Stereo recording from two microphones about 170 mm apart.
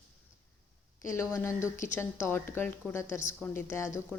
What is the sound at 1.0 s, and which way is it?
A woman's voice, 15° left (ahead or behind).